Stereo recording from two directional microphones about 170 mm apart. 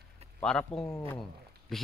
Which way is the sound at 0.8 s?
15° left (ahead or behind).